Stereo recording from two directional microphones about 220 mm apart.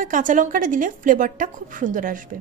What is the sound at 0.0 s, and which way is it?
Speech, 35° right (ahead or behind).